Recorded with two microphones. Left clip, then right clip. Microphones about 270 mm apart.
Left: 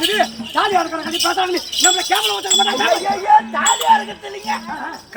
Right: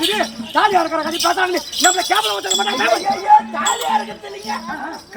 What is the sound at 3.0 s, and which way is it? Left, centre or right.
Speech, centre.